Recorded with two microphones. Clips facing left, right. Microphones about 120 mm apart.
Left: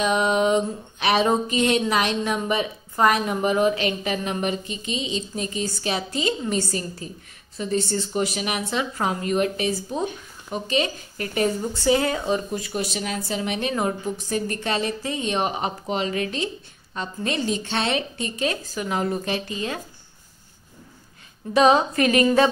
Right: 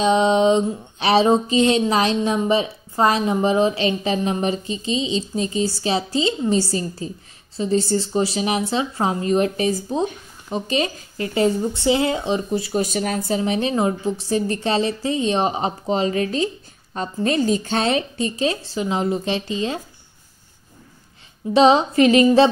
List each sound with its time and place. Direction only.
0.0 s a woman's voice: 30° right (ahead or behind)
12.8 s speech: 45° right (ahead or behind)
13.4 s a woman's voice: 30° right (ahead or behind)
21.5 s a woman's voice: 25° right (ahead or behind)